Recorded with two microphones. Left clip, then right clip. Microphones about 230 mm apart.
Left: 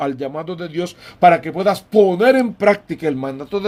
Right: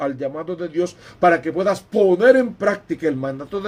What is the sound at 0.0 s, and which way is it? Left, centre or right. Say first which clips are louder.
Speech: left 2 dB; left.